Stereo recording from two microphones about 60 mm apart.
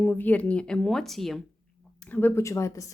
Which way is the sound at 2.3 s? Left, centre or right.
Left.